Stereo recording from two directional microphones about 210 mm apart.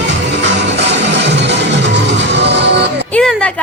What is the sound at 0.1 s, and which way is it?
Music, 55° right (ahead or behind).